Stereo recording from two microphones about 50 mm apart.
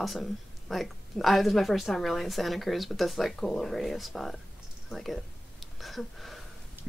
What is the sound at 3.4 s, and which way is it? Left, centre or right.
Speech, centre.